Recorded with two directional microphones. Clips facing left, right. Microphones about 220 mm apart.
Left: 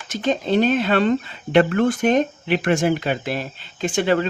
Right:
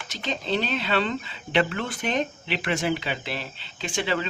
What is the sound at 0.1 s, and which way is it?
Speech, 50° left (ahead or behind).